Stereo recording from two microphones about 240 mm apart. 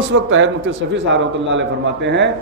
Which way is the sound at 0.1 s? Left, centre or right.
Right.